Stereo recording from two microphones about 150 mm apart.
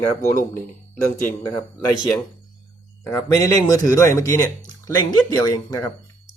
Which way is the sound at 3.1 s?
20° left (ahead or behind).